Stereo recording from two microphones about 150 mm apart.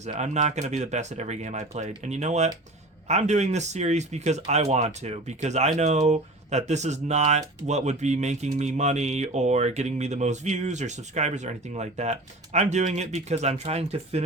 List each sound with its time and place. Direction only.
0.0 s speech: 50° right (ahead or behind)